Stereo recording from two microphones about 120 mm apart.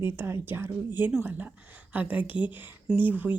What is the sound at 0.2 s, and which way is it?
Speech, 20° right (ahead or behind).